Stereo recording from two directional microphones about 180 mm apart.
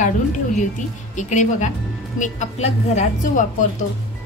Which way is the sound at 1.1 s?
40° left (ahead or behind).